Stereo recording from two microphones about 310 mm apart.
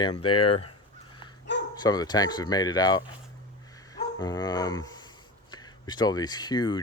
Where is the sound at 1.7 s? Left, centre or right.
Centre.